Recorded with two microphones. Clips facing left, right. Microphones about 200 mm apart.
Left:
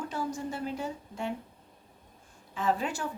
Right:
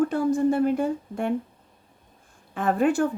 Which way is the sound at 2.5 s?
55° right (ahead or behind).